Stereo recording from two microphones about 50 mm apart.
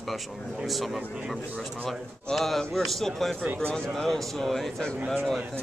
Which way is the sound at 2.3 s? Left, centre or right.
Centre.